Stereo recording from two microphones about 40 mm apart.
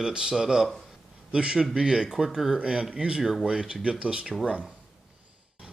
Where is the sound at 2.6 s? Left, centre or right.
Right.